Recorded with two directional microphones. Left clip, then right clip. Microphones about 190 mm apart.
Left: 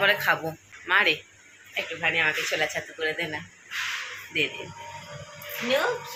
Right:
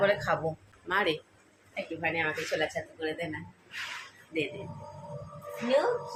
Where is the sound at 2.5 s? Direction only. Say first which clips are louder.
Left 4 dB; 20° left (ahead or behind).